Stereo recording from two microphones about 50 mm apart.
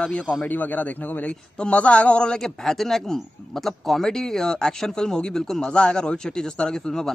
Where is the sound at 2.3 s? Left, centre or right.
Centre.